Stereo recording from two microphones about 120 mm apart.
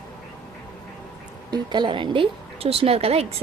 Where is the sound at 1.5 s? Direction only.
40° right (ahead or behind); by 3.3 s 55° right (ahead or behind).